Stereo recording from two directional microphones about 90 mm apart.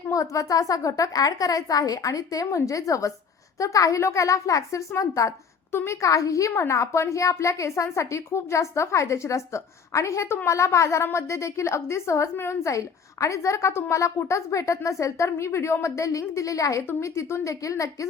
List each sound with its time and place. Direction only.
0.1 s a woman's voice: 40° left (ahead or behind)